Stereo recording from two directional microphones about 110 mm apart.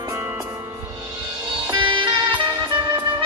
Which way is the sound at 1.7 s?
50° right (ahead or behind).